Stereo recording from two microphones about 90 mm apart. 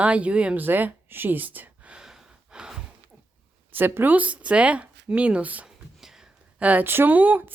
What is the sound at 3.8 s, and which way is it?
Speech, 25° right (ahead or behind).